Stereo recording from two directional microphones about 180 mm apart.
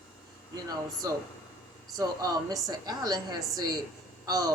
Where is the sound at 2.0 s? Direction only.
20° right (ahead or behind).